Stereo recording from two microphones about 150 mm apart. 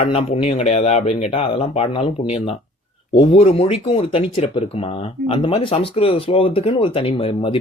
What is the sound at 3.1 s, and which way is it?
Speech, 40° left (ahead or behind).